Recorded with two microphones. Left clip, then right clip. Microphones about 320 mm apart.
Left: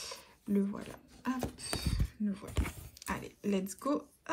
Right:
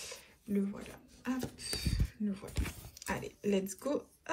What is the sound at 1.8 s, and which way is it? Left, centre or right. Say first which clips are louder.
Speech: left 2 dB; centre.